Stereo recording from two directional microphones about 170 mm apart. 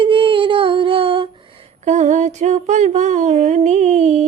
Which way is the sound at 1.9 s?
45° right (ahead or behind).